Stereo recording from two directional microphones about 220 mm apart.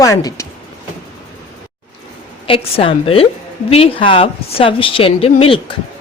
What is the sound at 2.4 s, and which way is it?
Speech, 25° left (ahead or behind).